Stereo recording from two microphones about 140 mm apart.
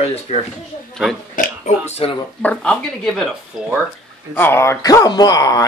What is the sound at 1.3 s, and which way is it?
Oink, 55° left (ahead or behind).